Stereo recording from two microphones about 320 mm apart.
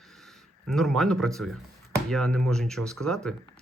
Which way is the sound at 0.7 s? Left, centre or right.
Centre.